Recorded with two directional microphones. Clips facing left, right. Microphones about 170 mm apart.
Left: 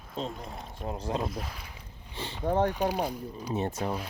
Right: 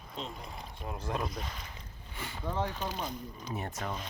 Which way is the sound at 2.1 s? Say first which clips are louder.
Left 4 dB; 25° left (ahead or behind).